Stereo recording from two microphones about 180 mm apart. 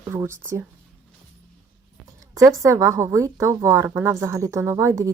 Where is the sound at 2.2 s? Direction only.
20° right (ahead or behind).